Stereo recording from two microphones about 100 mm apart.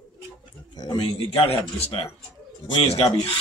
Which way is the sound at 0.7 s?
40° left (ahead or behind).